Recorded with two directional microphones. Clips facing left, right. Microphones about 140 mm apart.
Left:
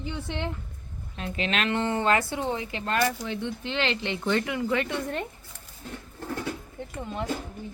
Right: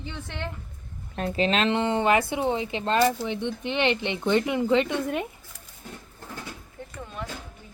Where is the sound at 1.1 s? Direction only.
40° right (ahead or behind).